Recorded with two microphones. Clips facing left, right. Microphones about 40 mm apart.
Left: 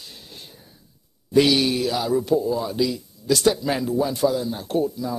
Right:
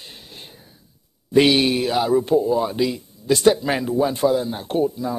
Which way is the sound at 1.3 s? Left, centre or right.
Right.